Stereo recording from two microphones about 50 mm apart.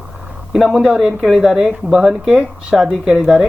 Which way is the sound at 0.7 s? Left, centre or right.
Centre.